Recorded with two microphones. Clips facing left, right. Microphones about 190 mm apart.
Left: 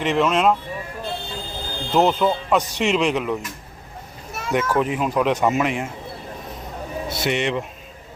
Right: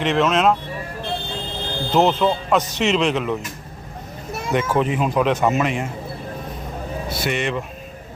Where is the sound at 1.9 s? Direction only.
Centre (ahead or behind).